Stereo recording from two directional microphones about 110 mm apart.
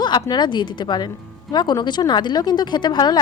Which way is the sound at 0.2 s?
40° left (ahead or behind).